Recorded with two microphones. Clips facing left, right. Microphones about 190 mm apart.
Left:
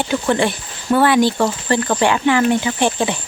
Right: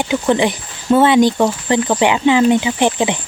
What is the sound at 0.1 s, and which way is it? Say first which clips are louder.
Speech: right 3 dB; 15° right (ahead or behind).